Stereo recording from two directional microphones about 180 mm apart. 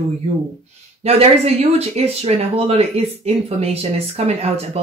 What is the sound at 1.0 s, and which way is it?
A woman's voice, 35° right (ahead or behind).